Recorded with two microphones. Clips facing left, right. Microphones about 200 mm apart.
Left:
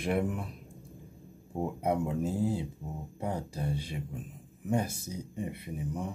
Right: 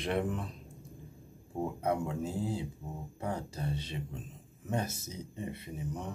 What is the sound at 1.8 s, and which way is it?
Speech, 15° left (ahead or behind).